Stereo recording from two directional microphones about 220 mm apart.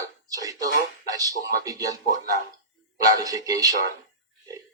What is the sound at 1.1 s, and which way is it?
Speech, 15° right (ahead or behind).